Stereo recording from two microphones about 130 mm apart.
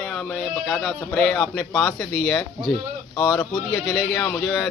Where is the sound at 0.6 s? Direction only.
5° left (ahead or behind).